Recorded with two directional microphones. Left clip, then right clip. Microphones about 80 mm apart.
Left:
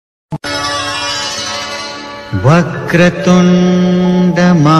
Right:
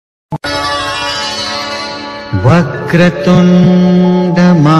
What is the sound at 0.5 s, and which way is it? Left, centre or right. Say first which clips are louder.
Music: right 2 dB; left.